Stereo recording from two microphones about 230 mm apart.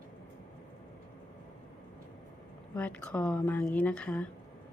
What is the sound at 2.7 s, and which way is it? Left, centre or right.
A woman's voice, centre.